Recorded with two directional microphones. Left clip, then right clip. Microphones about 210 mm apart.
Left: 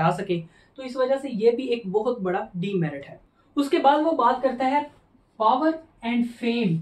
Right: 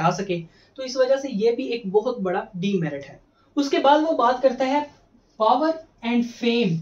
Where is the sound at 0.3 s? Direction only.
20° left (ahead or behind).